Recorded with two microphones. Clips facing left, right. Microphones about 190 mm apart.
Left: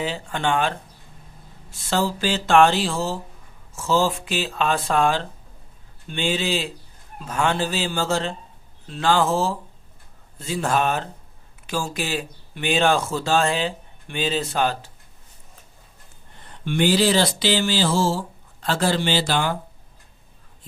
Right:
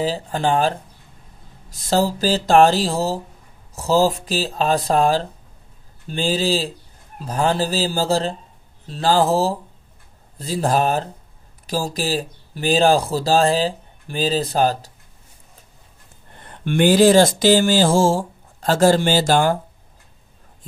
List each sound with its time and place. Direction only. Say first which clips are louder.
0.0 s speech: right 4 dB; 35° right (ahead or behind)
16.3 s speech: right 4 dB; 55° right (ahead or behind)